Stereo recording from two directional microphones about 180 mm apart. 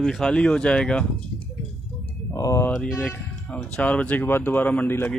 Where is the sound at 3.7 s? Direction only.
5° left (ahead or behind).